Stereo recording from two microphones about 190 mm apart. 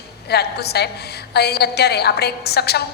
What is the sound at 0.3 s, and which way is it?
A woman's voice, 60° left (ahead or behind).